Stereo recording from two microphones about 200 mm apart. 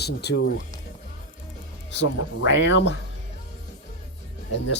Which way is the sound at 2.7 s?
65° left (ahead or behind).